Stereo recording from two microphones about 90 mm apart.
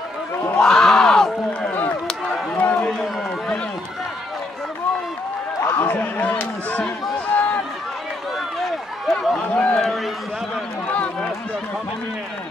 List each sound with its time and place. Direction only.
0.6 s crowd: 5° left (ahead or behind)
1.7 s run: 20° left (ahead or behind)
2.0 s a sound: 5° left (ahead or behind)
2.5 s a sound: 15° left (ahead or behind)
5.7 s a sound: 25° left (ahead or behind)
7.3 s run: 15° left (ahead or behind)
8.5 s run: centre (ahead or behind)
9.5 s run: 15° left (ahead or behind)
10.9 s run: 15° left (ahead or behind)